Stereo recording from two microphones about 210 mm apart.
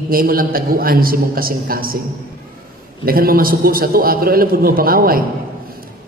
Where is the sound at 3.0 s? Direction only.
45° right (ahead or behind).